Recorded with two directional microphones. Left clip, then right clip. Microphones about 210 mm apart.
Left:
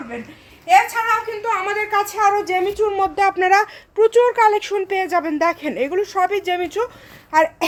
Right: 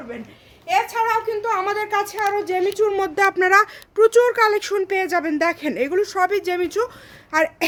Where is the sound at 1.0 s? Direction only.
40° right (ahead or behind).